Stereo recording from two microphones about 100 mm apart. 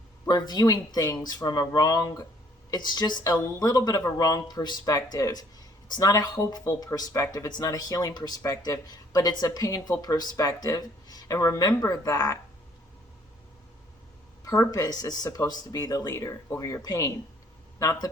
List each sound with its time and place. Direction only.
0.3 s speech: 45° left (ahead or behind)
14.7 s speech: 40° left (ahead or behind)
15.8 s speech: 30° left (ahead or behind)